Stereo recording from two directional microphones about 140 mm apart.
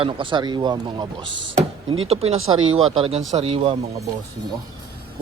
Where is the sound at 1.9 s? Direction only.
45° right (ahead or behind).